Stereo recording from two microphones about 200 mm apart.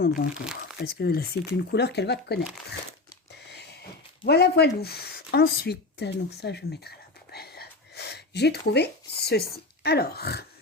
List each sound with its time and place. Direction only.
0.8 s speech: 55° left (ahead or behind)
3.4 s a sound: 55° left (ahead or behind)
4.3 s speech: 55° left (ahead or behind)